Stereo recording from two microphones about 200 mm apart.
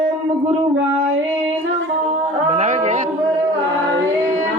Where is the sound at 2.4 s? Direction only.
35° right (ahead or behind).